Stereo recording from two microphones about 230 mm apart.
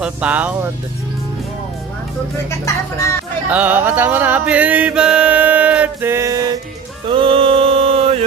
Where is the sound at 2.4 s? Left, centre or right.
Centre.